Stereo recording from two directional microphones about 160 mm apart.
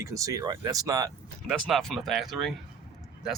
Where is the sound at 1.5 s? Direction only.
Centre (ahead or behind).